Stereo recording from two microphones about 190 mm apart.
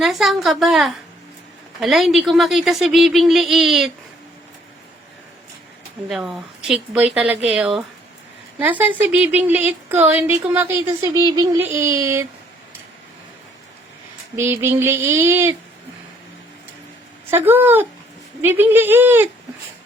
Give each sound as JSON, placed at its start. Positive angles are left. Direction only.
{"t": 0.0, "sound": "speech", "side_deg": 0}
{"t": 6.1, "sound": "a woman's voice", "side_deg": 0}
{"t": 14.3, "sound": "a woman's voice", "side_deg": -15}
{"t": 17.3, "sound": "a woman's voice", "side_deg": -10}